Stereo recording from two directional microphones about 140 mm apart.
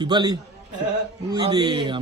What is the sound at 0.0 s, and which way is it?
Speech, 30° right (ahead or behind).